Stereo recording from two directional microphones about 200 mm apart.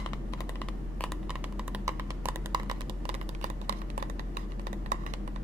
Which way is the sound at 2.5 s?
20° right (ahead or behind).